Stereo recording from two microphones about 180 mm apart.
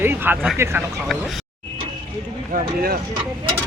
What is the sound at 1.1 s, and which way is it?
Speech, centre (ahead or behind).